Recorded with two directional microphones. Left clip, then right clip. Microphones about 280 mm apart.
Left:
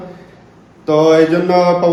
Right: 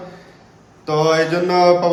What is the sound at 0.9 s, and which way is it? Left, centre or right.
A man's voice, centre.